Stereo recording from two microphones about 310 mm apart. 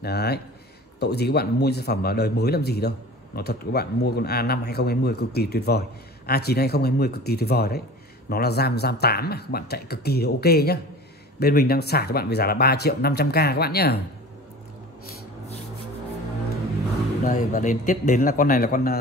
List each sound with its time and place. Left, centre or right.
0.0 s speech: left
17.2 s a man's voice: left